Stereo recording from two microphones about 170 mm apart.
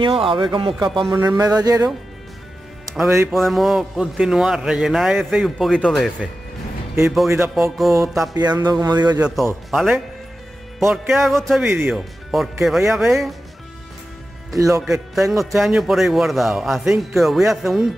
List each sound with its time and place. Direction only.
0.0 s speech: 30° right (ahead or behind)
1.1 s speech: 15° right (ahead or behind)
2.9 s a man's voice: centre (ahead or behind)
7.2 s music: 15° right (ahead or behind)
7.7 s a man's voice: centre (ahead or behind)
8.4 s speech: 25° right (ahead or behind)
9.2 s a man's voice: centre (ahead or behind)
11.6 s music: 10° right (ahead or behind)
11.9 s a man's voice: centre (ahead or behind)
14.8 s a man's voice: centre (ahead or behind)